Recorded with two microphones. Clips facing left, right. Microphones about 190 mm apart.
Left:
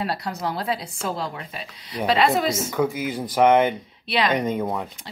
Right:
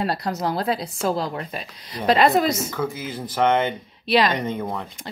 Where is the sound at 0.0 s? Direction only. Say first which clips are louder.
Right 3 dB; 40° right (ahead or behind).